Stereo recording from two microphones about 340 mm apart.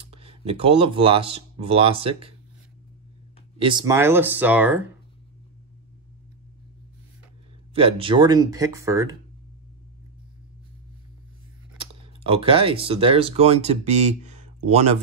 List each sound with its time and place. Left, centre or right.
0.1 s speech: centre
3.6 s speech: centre
7.7 s speech: centre
11.8 s speech: centre